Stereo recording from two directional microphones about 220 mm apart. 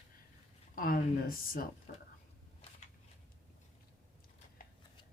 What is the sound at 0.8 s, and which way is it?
Speech, 40° left (ahead or behind).